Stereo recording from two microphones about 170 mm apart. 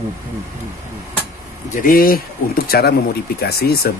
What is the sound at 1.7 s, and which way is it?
Speech, 55° left (ahead or behind).